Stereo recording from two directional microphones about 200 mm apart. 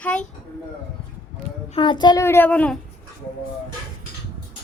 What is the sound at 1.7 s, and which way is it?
A child's voice, 25° left (ahead or behind).